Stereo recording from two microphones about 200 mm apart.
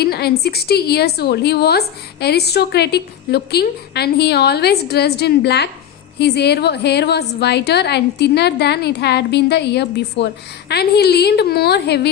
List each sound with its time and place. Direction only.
0.0 s a woman's voice: 50° left (ahead or behind)